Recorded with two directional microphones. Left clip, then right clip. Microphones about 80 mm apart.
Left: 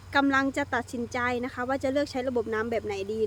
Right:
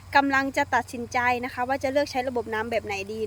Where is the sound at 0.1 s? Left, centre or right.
Centre.